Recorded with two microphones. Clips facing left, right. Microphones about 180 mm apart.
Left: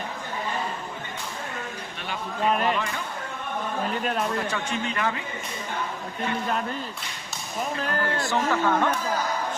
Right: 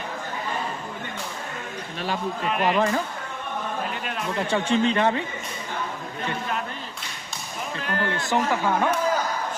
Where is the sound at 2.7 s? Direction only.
35° right (ahead or behind).